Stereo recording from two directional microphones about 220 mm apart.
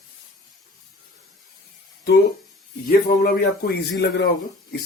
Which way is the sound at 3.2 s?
45° left (ahead or behind).